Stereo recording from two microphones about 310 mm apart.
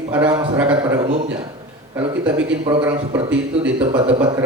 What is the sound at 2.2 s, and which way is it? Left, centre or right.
A man's voice, centre.